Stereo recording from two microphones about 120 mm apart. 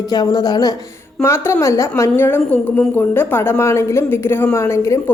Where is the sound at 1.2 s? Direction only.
20° left (ahead or behind).